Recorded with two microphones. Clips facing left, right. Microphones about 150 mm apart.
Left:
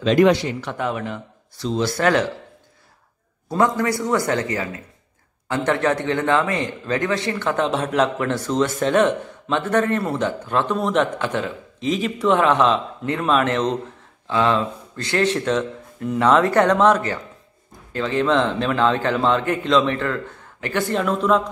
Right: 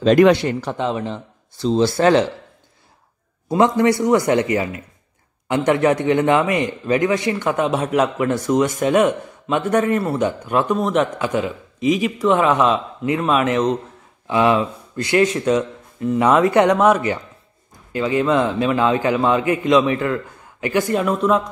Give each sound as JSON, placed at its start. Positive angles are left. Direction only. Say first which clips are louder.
{"t": 0.1, "sound": "speech", "louder": "right 3 dB", "side_deg": -60}
{"t": 0.7, "sound": "speech", "louder": "right 3 dB", "side_deg": -25}
{"t": 3.4, "sound": "a man's voice", "louder": "right 4 dB", "side_deg": -20}